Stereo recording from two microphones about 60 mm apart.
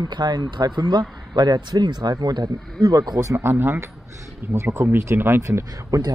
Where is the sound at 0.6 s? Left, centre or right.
Right.